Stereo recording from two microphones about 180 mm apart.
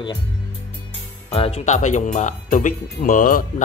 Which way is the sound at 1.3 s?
35° left (ahead or behind).